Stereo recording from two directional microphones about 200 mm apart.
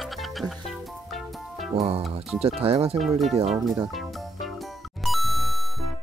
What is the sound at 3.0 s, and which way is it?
Speech, centre (ahead or behind).